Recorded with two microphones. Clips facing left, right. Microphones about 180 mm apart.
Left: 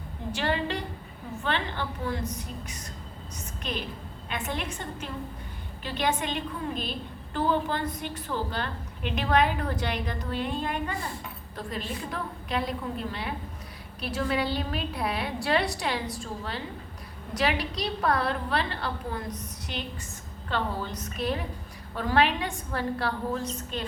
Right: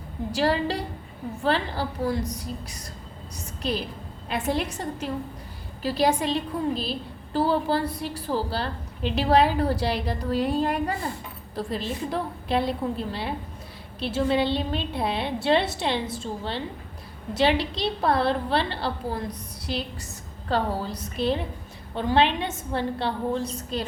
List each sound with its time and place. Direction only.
0.3 s a woman's voice: 35° right (ahead or behind)